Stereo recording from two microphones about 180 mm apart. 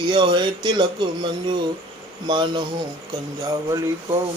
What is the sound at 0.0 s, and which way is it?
Speech, 25° right (ahead or behind).